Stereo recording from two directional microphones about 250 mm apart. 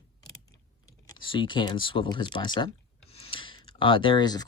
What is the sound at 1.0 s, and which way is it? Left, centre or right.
Speech, centre.